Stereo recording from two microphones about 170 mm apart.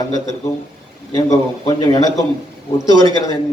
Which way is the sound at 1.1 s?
20° left (ahead or behind).